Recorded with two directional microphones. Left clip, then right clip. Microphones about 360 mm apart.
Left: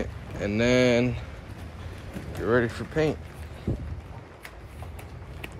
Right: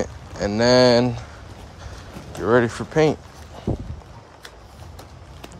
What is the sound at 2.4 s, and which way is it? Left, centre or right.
Speech, centre.